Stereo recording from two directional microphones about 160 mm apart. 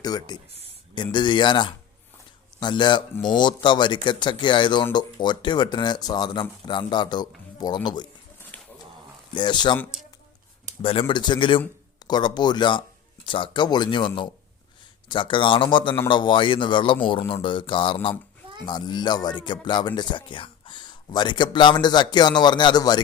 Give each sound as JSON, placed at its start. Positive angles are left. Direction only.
{"t": 0.0, "sound": "speech", "side_deg": 25}
{"t": 8.5, "sound": "dog", "side_deg": 10}
{"t": 9.3, "sound": "speech", "side_deg": 30}
{"t": 11.0, "sound": "a man's voice", "side_deg": 30}